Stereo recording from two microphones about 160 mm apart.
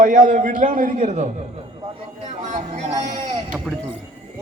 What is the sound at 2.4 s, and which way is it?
Music, 50° right (ahead or behind).